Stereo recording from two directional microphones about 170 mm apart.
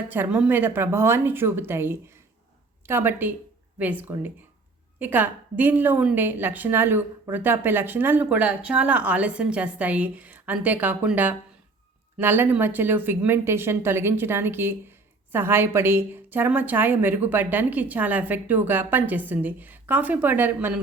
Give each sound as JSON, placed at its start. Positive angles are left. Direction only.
{"t": 0.1, "sound": "a woman's voice", "side_deg": -10}